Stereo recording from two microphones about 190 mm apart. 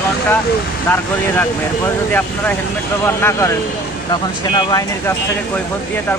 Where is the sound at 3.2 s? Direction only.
15° left (ahead or behind).